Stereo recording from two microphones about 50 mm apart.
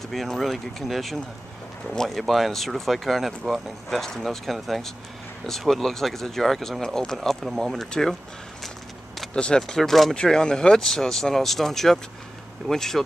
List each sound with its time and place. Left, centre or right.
0.1 s speech: centre
7.2 s speech: centre
9.3 s speech: centre
9.6 s speech: centre